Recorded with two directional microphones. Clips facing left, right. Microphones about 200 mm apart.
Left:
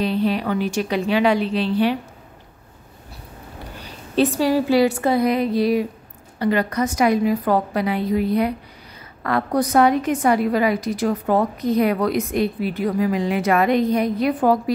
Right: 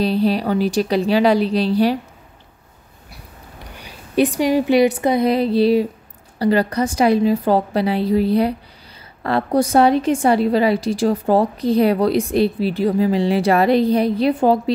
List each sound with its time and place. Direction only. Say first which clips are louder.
0.0 s a woman's voice: right 3 dB; 35° right (ahead or behind)
3.8 s a woman's voice: right 2 dB; 15° right (ahead or behind)
5.3 s a woman's voice: right 4 dB; 30° right (ahead or behind)